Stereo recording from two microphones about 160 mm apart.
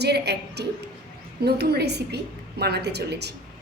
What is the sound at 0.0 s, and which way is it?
A woman's voice, 90° right.